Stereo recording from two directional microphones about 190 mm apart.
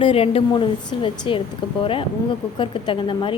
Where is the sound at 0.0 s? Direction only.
30° left (ahead or behind).